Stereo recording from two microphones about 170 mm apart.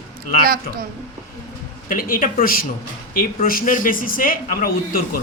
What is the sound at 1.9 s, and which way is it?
Speech, 55° left (ahead or behind).